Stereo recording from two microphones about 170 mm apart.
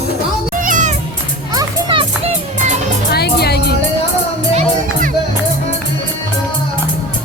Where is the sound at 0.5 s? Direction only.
50° right (ahead or behind).